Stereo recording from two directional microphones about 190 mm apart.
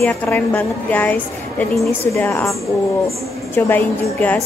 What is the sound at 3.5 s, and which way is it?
Speech, 10° left (ahead or behind).